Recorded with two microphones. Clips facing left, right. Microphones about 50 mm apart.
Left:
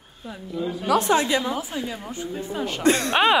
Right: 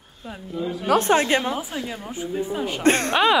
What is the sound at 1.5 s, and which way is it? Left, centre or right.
A woman's voice, centre.